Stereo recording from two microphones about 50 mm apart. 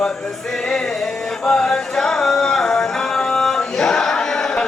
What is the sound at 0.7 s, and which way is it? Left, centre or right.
Music, centre.